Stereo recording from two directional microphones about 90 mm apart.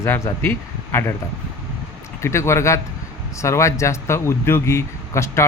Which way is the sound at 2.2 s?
30° left (ahead or behind).